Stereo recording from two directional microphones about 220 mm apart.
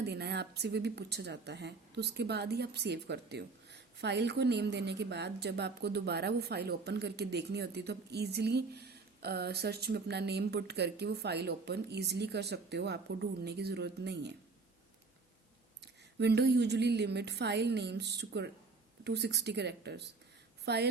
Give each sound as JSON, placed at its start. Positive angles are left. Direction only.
{"t": 0.0, "sound": "speech", "side_deg": -50}
{"t": 15.8, "sound": "speech", "side_deg": -50}